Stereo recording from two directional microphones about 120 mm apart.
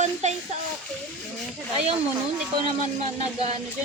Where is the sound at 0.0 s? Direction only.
70° right (ahead or behind).